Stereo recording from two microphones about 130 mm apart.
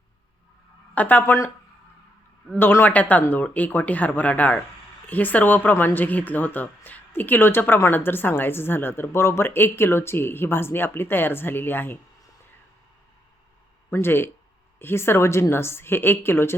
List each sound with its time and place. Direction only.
0.9 s speech: 15° left (ahead or behind)
2.6 s speech: 15° left (ahead or behind)
13.9 s a woman's voice: 20° left (ahead or behind)